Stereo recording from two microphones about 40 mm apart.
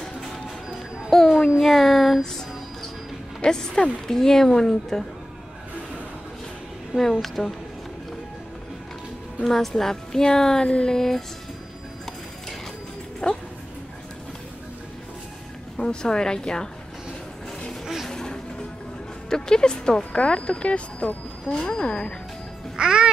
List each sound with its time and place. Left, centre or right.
0.0 s music: centre
1.6 s a sound: centre
3.4 s speech: left
4.1 s speech: centre
7.0 s speech: centre
9.4 s speech: centre
13.2 s dog: centre
15.8 s speech: centre
18.0 s music: centre
19.2 s speech: centre; by 21.5 s left
21.5 s speech: left
22.8 s speech: centre